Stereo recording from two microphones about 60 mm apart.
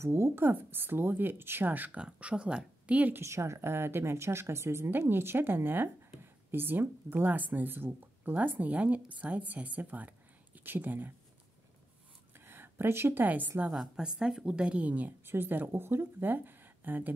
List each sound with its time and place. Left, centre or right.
0.0 s a woman's voice: right
2.0 s speech: centre
3.2 s a woman's voice: right
12.4 s a sound: right
13.2 s speech: right
13.7 s speech: centre; by 15.1 s right
15.2 s a woman's voice: right